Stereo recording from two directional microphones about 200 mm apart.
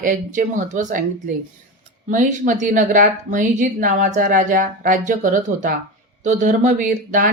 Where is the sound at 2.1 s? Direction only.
40° right (ahead or behind).